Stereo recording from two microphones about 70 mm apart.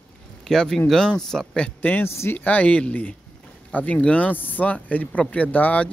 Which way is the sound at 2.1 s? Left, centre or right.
Left.